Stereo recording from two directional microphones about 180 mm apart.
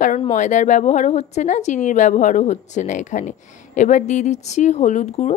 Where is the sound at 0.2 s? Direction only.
40° left (ahead or behind).